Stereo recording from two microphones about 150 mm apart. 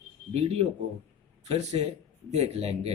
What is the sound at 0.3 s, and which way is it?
Speech, 45° right (ahead or behind).